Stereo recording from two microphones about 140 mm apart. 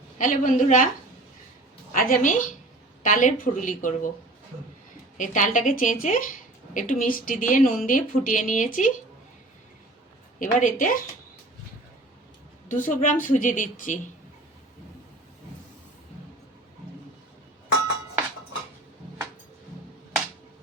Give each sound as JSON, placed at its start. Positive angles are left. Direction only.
{"t": 0.2, "sound": "a woman's voice", "side_deg": 70}
{"t": 1.9, "sound": "a woman's voice", "side_deg": 85}
{"t": 5.1, "sound": "a woman's voice", "side_deg": 65}
{"t": 7.0, "sound": "a woman's voice", "side_deg": 85}
{"t": 10.4, "sound": "a woman's voice", "side_deg": 70}
{"t": 12.6, "sound": "a woman's voice", "side_deg": 70}